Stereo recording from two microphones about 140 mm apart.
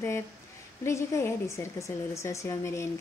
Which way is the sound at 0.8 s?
20° left (ahead or behind).